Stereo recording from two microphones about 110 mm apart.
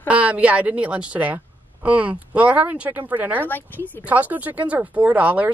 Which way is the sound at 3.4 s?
15° left (ahead or behind).